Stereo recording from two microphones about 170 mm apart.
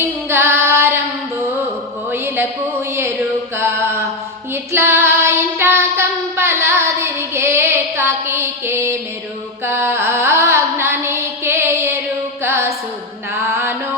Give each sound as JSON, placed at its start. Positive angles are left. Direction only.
{"t": 0.0, "sound": "female singing", "side_deg": -15}
{"t": 2.1, "sound": "a sound", "side_deg": -15}
{"t": 4.7, "sound": "child singing", "side_deg": -15}
{"t": 9.6, "sound": "carnatic music", "side_deg": -15}
{"t": 12.4, "sound": "music", "side_deg": -15}